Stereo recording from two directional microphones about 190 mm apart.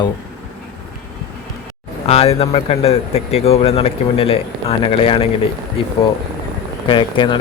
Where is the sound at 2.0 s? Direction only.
30° left (ahead or behind).